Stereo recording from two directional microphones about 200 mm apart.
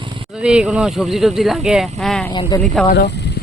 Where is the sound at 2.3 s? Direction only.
20° left (ahead or behind).